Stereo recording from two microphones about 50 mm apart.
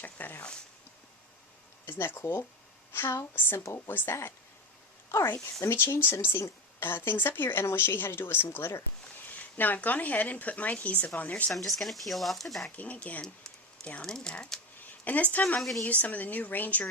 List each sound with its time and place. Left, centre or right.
0.0 s speech: left
1.9 s a woman's voice: left
3.8 s a woman's voice: left
5.7 s speech: left
8.5 s speech: left
9.2 s speech: left
11.5 s speech: centre
12.7 s speech: left
14.0 s speech: centre
14.8 s speech: left